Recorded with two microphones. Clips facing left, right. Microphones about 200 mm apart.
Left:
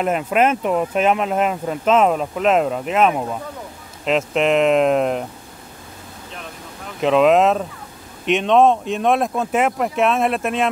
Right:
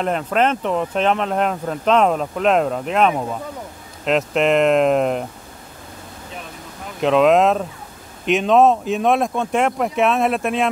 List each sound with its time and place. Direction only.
0.0 s speech: 10° left (ahead or behind)
7.0 s speech: centre (ahead or behind)